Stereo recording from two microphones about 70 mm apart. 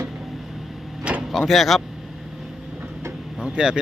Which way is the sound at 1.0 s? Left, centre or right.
Centre.